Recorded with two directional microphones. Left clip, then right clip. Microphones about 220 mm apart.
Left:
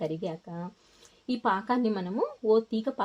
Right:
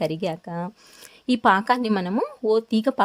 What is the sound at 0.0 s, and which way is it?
Speech, 40° right (ahead or behind).